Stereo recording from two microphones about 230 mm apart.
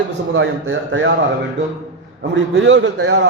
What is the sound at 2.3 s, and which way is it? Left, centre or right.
Speech, right.